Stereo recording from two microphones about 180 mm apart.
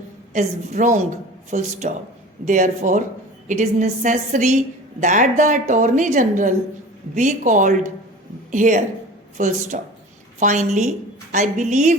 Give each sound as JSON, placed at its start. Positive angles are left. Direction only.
{"t": 0.3, "sound": "a woman's voice", "side_deg": -45}